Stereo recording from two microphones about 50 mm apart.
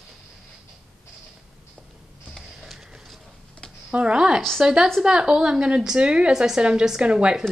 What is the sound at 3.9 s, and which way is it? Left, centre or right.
A woman's voice, right.